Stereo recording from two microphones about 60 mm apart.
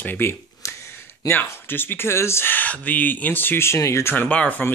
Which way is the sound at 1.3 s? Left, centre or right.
Left.